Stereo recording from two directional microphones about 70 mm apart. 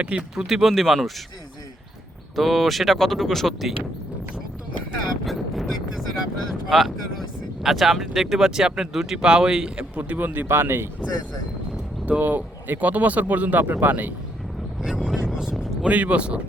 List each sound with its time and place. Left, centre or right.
0.0 s speech: centre
0.4 s speech: centre
2.3 s speech: centre
5.2 s a sound: centre
6.7 s speech: centre; by 10.8 s right
12.0 s speech: right
14.8 s vehicle: centre
15.4 s speech: centre